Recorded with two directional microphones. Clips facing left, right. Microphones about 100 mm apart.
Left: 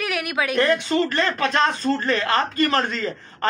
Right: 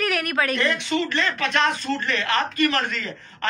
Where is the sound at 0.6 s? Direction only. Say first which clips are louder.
Left 4 dB; 40° left (ahead or behind).